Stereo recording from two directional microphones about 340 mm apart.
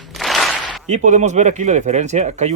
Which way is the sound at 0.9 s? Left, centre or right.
Right.